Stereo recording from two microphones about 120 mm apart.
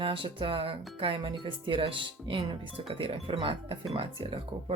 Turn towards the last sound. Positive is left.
turn(degrees=-50)  # may be behind; listen again after turning